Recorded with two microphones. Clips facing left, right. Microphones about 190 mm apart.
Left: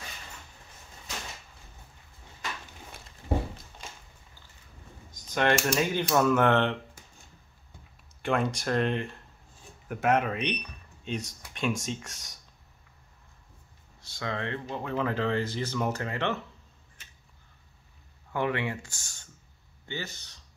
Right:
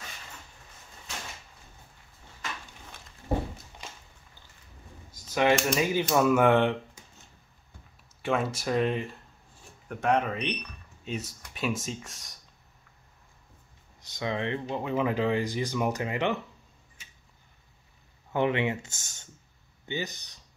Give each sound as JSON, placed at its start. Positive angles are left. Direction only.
{"t": 5.1, "sound": "speech", "side_deg": -5}
{"t": 8.2, "sound": "speech", "side_deg": -5}
{"t": 14.0, "sound": "speech", "side_deg": -15}
{"t": 18.3, "sound": "speech", "side_deg": -20}